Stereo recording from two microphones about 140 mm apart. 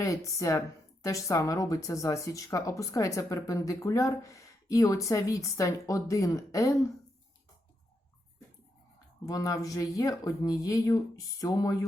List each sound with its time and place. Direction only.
0.0 s speech: 20° left (ahead or behind)
9.2 s speech: 25° left (ahead or behind)